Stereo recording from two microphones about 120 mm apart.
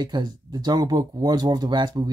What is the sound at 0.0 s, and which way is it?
Speech, 35° right (ahead or behind).